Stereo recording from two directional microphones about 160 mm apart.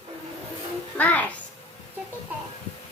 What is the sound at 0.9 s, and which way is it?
Music, 10° left (ahead or behind).